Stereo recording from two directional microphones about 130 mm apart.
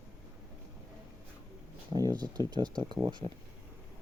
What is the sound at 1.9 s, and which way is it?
Speech, 30° right (ahead or behind).